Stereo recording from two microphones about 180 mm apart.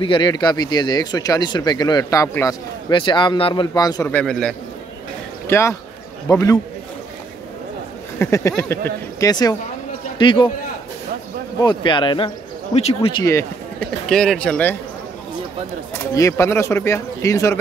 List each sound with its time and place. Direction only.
0.0 s speech: 25° left (ahead or behind)
2.9 s speech: 25° left (ahead or behind)
4.1 s speech: 5° left (ahead or behind)
5.5 s speech: 15° left (ahead or behind)
8.2 s a man's voice: 15° left (ahead or behind)
11.6 s speech: 25° left (ahead or behind)
13.1 s speech: 15° left (ahead or behind)
14.0 s speech: 5° left (ahead or behind)
16.1 s speech: 15° left (ahead or behind)